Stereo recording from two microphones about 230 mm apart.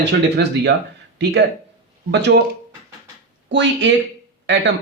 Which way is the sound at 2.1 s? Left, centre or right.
Right.